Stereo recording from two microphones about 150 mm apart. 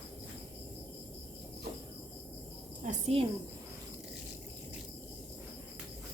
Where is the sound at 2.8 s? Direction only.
55° right (ahead or behind).